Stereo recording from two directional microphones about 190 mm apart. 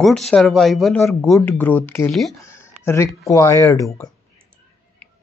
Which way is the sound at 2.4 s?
15° left (ahead or behind).